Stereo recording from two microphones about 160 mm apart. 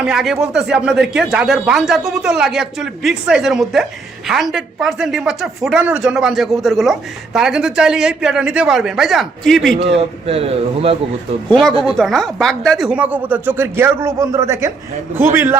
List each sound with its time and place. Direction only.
0.0 s speech: 5° right (ahead or behind)
9.9 s speech: 40° right (ahead or behind)
11.9 s speech: 5° left (ahead or behind); by 15.5 s 15° right (ahead or behind)